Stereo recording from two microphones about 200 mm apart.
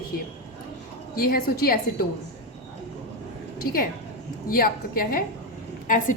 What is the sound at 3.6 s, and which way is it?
A woman's voice, 45° left (ahead or behind).